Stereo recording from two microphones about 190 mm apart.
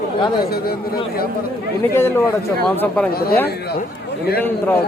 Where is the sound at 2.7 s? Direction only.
10° left (ahead or behind).